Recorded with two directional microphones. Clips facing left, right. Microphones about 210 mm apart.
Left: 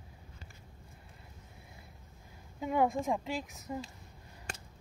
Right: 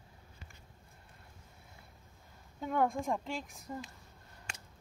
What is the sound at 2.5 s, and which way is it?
Speech, 5° left (ahead or behind).